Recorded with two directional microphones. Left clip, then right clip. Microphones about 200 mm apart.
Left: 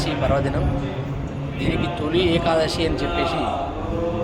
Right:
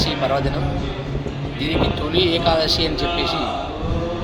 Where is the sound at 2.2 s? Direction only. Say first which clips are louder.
Right 2 dB; 5° left (ahead or behind).